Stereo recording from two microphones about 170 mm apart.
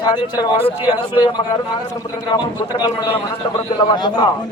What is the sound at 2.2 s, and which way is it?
Speech, 25° left (ahead or behind).